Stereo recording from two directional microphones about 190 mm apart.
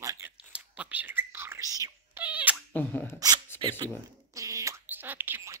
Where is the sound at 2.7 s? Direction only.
10° left (ahead or behind).